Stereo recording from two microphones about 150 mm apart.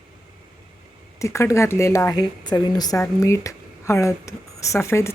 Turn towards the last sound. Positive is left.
turn(degrees=20)  # may be behind; listen again after turning